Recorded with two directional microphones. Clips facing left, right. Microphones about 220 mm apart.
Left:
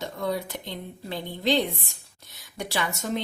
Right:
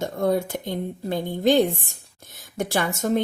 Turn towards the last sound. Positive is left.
turn(degrees=-50)  # may be behind; listen again after turning